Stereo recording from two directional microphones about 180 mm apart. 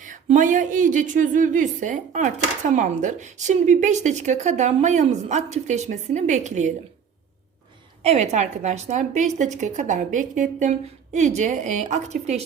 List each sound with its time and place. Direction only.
0.0 s speech: 45° right (ahead or behind)
8.0 s speech: 35° right (ahead or behind)